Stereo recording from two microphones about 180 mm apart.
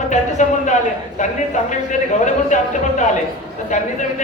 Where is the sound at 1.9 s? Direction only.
40° left (ahead or behind).